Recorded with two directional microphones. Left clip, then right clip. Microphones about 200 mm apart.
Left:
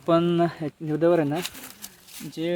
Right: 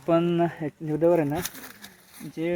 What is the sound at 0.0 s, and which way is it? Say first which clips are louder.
Speech: left 1 dB; 20° left (ahead or behind).